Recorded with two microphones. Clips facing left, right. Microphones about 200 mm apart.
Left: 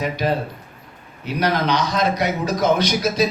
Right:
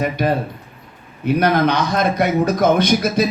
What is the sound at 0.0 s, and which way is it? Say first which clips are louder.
Speech: right 3 dB; 55° right (ahead or behind).